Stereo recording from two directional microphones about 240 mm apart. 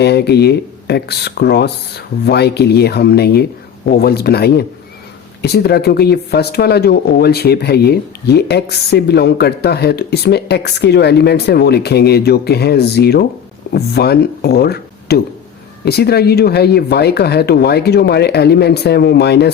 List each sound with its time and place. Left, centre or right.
0.0 s speech: left